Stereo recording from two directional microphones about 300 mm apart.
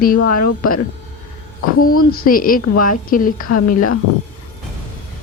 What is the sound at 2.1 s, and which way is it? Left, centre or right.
A woman's voice, left.